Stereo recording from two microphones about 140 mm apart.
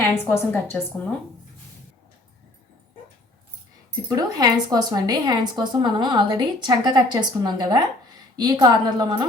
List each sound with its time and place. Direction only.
0.0 s a woman's voice: 15° left (ahead or behind)
4.1 s a woman's voice: 30° right (ahead or behind)